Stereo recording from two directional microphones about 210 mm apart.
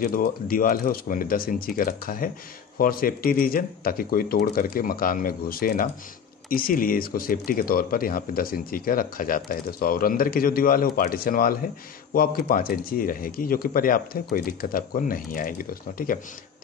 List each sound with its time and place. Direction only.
0.0 s speech: 45° left (ahead or behind)